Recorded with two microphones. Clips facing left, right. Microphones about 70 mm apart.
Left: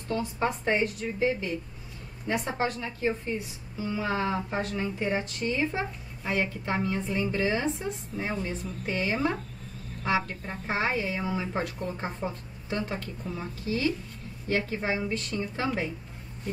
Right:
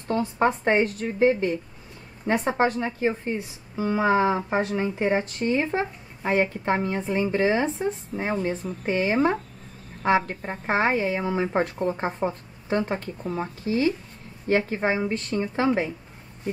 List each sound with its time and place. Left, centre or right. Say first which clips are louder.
0.1 s a woman's voice: right 6 dB; right
4.5 s speech: right 6 dB; right
4.7 s speech: right 6 dB; right